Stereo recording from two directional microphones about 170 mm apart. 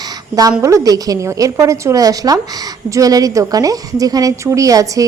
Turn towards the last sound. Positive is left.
turn(degrees=-20)  # may be behind; listen again after turning